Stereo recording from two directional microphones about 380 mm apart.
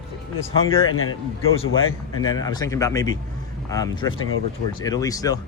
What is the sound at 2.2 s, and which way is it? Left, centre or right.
Speech, centre.